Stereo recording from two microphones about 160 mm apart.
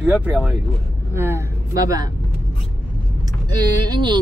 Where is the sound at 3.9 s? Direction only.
30° right (ahead or behind).